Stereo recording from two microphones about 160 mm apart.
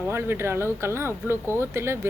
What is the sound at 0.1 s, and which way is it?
A woman's voice, 15° right (ahead or behind).